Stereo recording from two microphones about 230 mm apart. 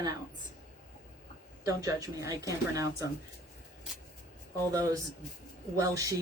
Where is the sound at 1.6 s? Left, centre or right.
Centre.